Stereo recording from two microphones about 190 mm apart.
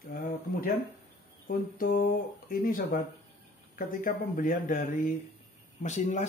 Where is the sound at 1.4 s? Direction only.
50° left (ahead or behind).